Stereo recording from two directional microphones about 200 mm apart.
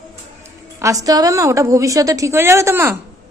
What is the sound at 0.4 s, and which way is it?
A woman's voice, 15° right (ahead or behind).